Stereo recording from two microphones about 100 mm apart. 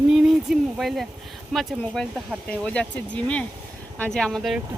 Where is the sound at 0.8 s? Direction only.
Centre (ahead or behind).